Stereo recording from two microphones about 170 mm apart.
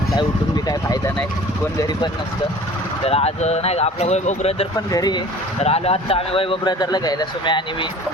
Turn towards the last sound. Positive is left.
turn(degrees=30)  # may be behind; listen again after turning